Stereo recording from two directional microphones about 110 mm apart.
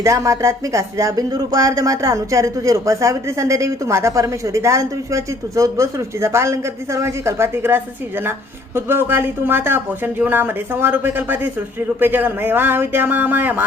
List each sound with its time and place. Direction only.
0.0 s speech: 30° right (ahead or behind)